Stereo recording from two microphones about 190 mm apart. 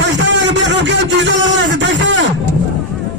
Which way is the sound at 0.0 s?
70° right (ahead or behind).